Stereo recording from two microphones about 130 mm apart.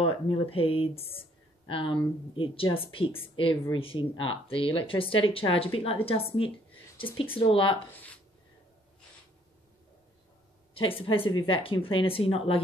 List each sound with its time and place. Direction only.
0.0 s speech: 45° left (ahead or behind)
10.7 s speech: 45° left (ahead or behind)